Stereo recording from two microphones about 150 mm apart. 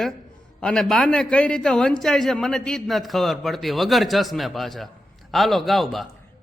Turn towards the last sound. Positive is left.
turn(degrees=0)  # may be behind; listen again after turning